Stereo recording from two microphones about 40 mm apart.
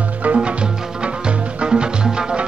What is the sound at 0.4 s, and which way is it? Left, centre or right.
Music, right.